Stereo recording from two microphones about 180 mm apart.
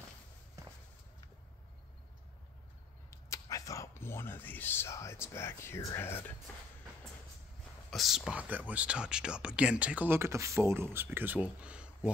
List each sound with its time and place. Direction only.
3.1 s speech: 20° left (ahead or behind)
7.9 s speech: centre (ahead or behind)